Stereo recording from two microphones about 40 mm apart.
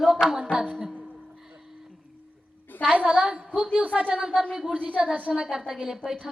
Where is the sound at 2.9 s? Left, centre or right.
Right.